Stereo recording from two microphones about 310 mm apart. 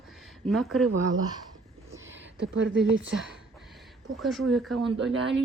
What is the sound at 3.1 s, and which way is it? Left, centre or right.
Speech, centre.